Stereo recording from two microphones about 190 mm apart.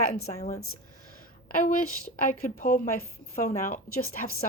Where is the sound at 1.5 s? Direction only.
45° left (ahead or behind).